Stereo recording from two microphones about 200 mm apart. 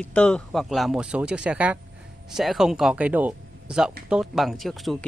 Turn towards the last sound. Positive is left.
turn(degrees=0)  # may be behind; listen again after turning